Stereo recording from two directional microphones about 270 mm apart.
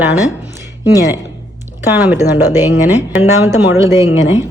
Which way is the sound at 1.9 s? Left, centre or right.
Centre.